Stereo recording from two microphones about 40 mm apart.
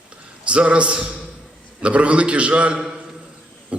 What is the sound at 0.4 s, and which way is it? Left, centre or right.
A man's voice, right.